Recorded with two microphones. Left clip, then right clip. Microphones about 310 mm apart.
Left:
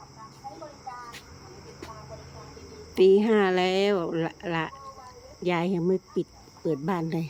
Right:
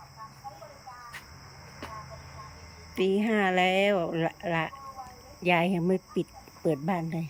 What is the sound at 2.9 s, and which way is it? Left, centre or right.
Speech, centre.